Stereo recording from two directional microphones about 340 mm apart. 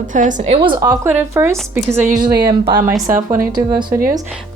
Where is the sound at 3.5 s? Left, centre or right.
Centre.